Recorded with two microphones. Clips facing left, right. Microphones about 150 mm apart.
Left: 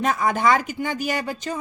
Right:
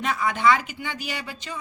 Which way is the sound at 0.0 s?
45° left (ahead or behind).